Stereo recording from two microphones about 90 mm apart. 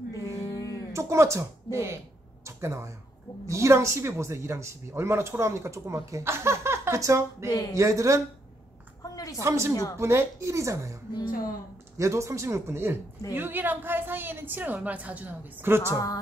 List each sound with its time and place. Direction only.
0.4 s a sound: 35° left (ahead or behind)
0.9 s speech: 35° right (ahead or behind)
9.0 s a sound: 40° left (ahead or behind)
9.4 s speech: 30° right (ahead or behind)
12.0 s a woman's voice: 35° right (ahead or behind)
15.9 s speech: 40° left (ahead or behind)